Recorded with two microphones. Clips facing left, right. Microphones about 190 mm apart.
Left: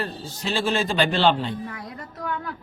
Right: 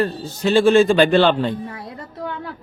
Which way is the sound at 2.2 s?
30° right (ahead or behind).